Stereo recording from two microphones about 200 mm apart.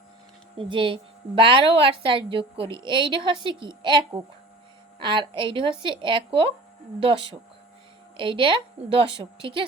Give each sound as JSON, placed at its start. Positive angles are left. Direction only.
{"t": 0.5, "sound": "a woman's voice", "side_deg": -25}